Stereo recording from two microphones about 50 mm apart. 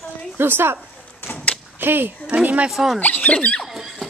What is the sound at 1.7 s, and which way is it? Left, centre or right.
Speech, right.